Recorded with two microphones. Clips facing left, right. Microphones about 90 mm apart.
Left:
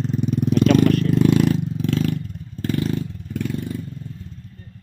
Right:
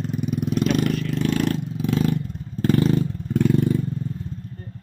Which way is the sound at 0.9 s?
50° left (ahead or behind).